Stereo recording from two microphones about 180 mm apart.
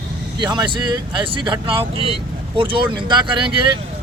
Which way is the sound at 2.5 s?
25° right (ahead or behind).